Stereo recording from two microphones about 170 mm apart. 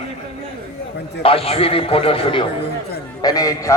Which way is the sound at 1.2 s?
35° left (ahead or behind).